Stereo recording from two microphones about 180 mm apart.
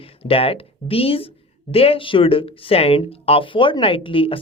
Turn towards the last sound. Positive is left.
turn(degrees=30)  # may be behind; listen again after turning